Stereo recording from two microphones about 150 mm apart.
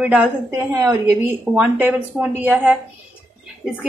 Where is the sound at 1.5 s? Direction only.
10° right (ahead or behind).